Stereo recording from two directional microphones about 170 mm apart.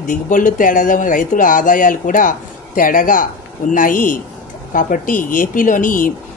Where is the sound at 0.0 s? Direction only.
50° left (ahead or behind).